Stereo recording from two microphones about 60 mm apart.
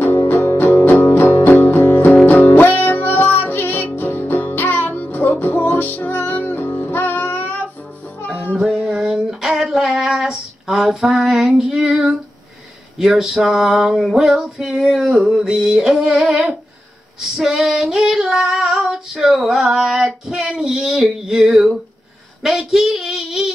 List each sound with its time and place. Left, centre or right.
0.3 s music: left
8.6 s a sound: centre
12.9 s female singing: centre
22.4 s speech: centre